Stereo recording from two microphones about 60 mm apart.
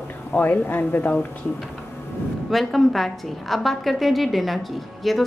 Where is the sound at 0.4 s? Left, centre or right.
Left.